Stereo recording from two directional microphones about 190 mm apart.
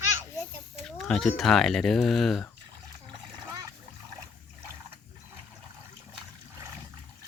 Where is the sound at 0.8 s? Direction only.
Centre (ahead or behind).